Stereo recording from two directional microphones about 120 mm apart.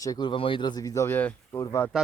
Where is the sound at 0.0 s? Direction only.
30° left (ahead or behind).